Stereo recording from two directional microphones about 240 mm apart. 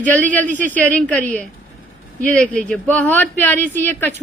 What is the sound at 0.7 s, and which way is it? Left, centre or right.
Speech, centre.